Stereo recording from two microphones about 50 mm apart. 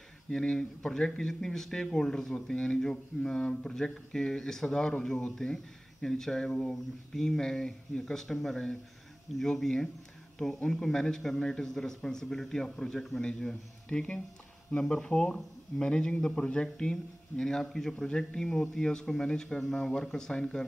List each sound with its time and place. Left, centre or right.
0.3 s speech: centre